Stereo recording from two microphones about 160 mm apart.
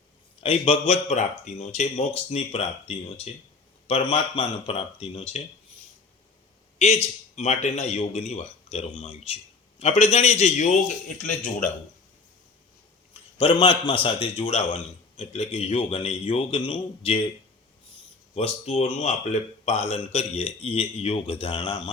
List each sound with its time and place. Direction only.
0.4 s a man's voice: 35° left (ahead or behind)
6.7 s a man's voice: 45° left (ahead or behind)
13.4 s a man's voice: 30° left (ahead or behind)
18.3 s a man's voice: 40° left (ahead or behind)